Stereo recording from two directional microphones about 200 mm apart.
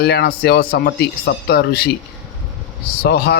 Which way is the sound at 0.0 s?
55° left (ahead or behind).